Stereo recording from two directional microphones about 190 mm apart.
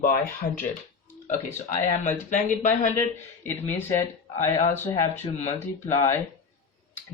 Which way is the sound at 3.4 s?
10° left (ahead or behind).